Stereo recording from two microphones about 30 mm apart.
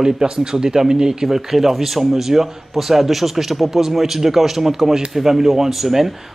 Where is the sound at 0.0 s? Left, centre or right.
Right.